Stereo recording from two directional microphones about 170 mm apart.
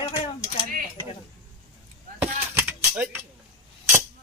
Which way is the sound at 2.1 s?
10° right (ahead or behind).